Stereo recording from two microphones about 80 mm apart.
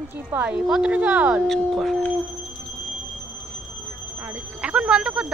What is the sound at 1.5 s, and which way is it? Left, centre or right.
Speech, centre.